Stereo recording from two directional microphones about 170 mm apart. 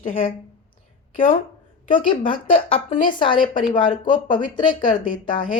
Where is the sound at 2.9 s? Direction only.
50° left (ahead or behind).